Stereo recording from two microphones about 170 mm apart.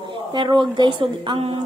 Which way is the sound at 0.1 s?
30° right (ahead or behind).